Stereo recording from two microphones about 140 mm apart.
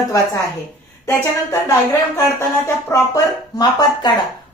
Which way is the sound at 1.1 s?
20° left (ahead or behind).